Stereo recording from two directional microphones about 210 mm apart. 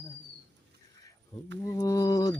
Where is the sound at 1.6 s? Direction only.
15° left (ahead or behind).